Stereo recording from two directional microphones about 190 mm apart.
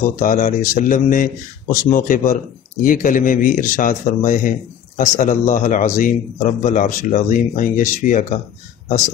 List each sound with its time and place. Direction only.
0.1 s speech: 45° left (ahead or behind)